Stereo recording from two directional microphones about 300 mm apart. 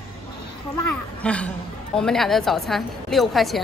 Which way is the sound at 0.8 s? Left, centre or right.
Centre.